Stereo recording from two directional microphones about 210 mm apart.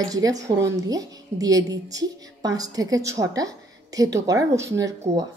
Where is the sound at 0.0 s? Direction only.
15° right (ahead or behind).